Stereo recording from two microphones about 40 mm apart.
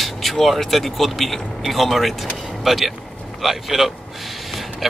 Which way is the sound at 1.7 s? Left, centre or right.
Centre.